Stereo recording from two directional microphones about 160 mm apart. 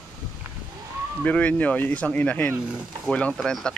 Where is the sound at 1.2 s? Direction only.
10° left (ahead or behind).